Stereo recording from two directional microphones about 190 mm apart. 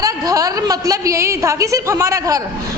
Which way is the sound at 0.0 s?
20° right (ahead or behind).